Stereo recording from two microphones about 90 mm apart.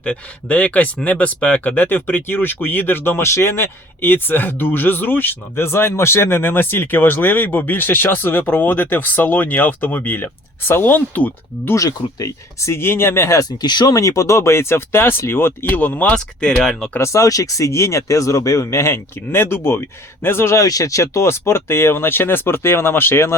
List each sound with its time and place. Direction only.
0.0 s speech: 15° left (ahead or behind)
11.7 s speech: 40° left (ahead or behind)
13.6 s speech: 50° left (ahead or behind)
13.9 s speech: 40° left (ahead or behind); by 17.0 s 5° left (ahead or behind)
17.0 s speech: 35° left (ahead or behind)